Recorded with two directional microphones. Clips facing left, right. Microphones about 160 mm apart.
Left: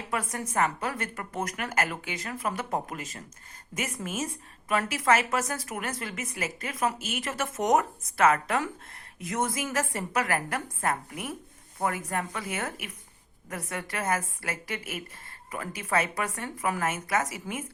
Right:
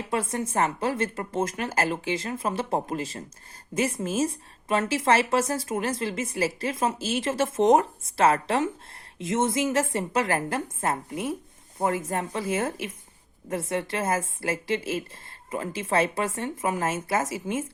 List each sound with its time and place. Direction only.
0.1 s a woman's voice: 25° right (ahead or behind)